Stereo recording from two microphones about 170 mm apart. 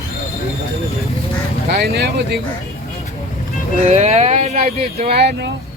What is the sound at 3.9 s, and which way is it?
Speech, 40° right (ahead or behind).